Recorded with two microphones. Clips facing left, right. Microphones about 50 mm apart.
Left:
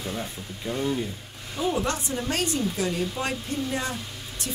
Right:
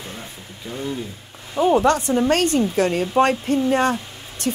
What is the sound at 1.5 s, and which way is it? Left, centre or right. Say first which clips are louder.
Speech: right 10 dB; right.